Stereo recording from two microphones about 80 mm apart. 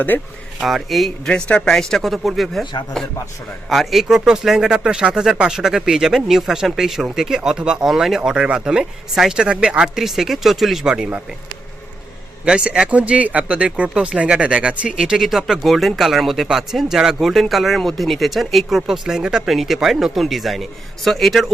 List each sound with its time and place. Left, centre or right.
0.1 s speech: left
0.6 s speech: centre
1.3 s a man's voice: centre
12.5 s speech: centre